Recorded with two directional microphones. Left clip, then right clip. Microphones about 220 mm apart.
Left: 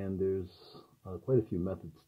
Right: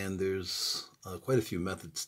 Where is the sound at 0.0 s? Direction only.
40° right (ahead or behind).